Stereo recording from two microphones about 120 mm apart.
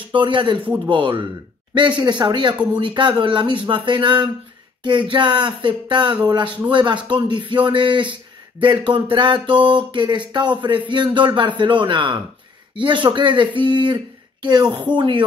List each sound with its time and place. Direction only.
0.1 s a man's voice: 40° right (ahead or behind)